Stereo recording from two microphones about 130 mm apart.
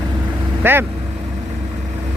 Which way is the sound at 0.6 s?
15° right (ahead or behind).